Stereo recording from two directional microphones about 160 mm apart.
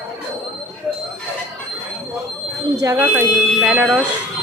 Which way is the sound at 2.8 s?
15° right (ahead or behind).